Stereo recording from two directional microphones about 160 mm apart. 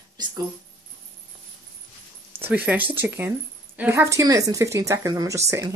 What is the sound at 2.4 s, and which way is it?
A woman's voice, 10° right (ahead or behind).